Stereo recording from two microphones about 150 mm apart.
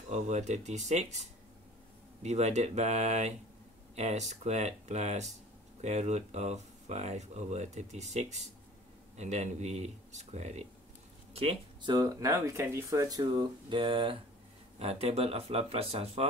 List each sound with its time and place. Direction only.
0.1 s speech: 50° right (ahead or behind)
11.9 s speech: 25° right (ahead or behind); by 16.3 s 40° right (ahead or behind)